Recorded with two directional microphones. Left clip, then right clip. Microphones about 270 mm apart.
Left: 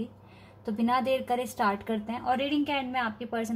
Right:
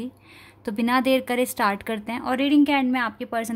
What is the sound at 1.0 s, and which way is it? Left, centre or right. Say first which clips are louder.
A woman's voice: right 6 dB; right.